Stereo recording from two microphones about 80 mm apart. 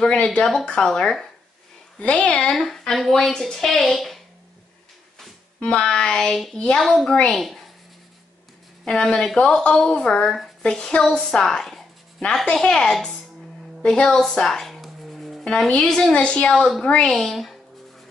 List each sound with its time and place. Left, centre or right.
0.0 s speech: centre
5.6 s speech: centre
8.8 s speech: centre